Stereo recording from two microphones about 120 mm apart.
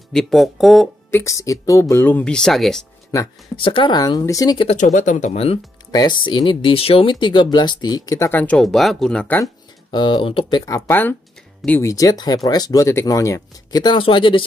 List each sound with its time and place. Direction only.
0.1 s speech: 5° left (ahead or behind)
1.1 s speech: 25° left (ahead or behind); by 2.9 s 5° left (ahead or behind)
3.1 s speech: 25° left (ahead or behind)
3.5 s speech: 45° left (ahead or behind)
4.7 s speech: 90° left; by 5.6 s 60° left (ahead or behind)
5.9 s speech: 35° left (ahead or behind)
8.3 s speech: 10° left (ahead or behind)
8.6 s speech: centre (ahead or behind)
9.8 s speech: 40° left (ahead or behind)
10.9 s speech: 15° left (ahead or behind)
11.8 s speech: 30° left (ahead or behind); by 14.4 s 45° left (ahead or behind)